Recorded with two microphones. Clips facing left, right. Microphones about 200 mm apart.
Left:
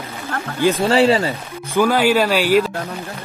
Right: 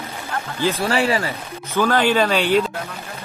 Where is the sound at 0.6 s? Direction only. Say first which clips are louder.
Left 5 dB; 15° left (ahead or behind).